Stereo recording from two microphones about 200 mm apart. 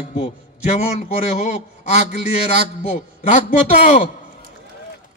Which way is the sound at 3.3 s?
35° left (ahead or behind).